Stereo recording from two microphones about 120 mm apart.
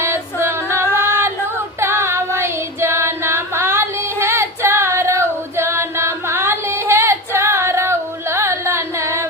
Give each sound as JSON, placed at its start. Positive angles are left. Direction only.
{"t": 0.0, "sound": "female singing", "side_deg": -20}